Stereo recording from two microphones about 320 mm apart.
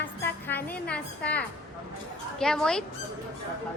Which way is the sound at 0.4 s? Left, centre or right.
Centre.